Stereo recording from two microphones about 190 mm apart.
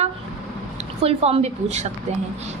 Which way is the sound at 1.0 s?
30° right (ahead or behind).